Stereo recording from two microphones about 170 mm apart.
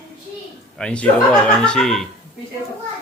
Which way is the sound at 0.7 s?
5° left (ahead or behind).